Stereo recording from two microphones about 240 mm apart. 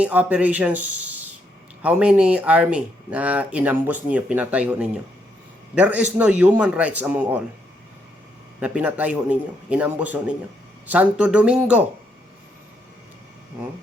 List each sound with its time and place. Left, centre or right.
0.0 s speech: centre
8.6 s speech: centre